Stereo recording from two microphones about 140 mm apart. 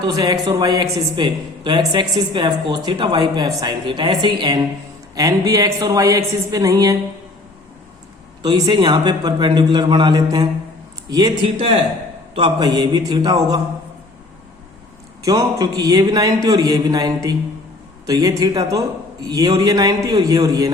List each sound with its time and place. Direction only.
0.1 s a man's voice: 25° right (ahead or behind)
8.4 s a woman's voice: 30° right (ahead or behind)
11.4 s a woman's voice: 40° right (ahead or behind)
12.4 s a man's voice: 30° right (ahead or behind)
15.2 s a man's voice: 25° right (ahead or behind)